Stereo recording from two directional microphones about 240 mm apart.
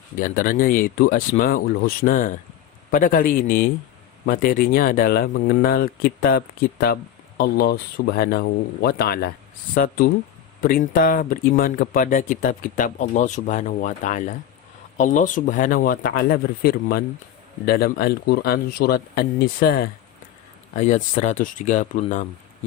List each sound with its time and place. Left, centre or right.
0.2 s speech: left